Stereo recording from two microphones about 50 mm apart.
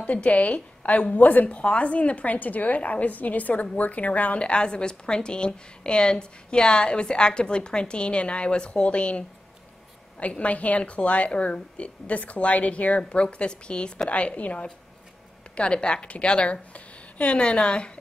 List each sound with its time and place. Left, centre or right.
0.0 s a woman's voice: left